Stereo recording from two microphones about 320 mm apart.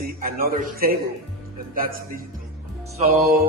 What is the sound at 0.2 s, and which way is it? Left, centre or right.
Speech, right.